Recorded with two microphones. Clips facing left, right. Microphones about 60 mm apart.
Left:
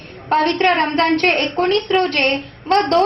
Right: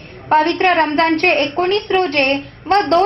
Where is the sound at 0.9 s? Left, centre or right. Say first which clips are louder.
Right 2 dB; right.